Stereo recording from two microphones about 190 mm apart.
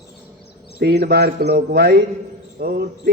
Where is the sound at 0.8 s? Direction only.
60° right (ahead or behind).